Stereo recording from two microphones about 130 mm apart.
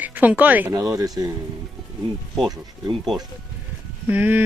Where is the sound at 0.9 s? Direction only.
30° right (ahead or behind).